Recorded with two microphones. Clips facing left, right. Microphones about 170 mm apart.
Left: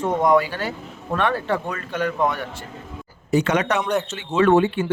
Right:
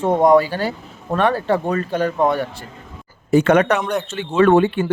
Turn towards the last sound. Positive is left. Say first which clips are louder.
# right 3 dB
turn(degrees=-55)  # may be behind; listen again after turning